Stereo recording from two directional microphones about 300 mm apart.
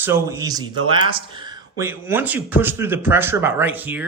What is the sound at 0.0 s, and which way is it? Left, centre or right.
Speech, centre.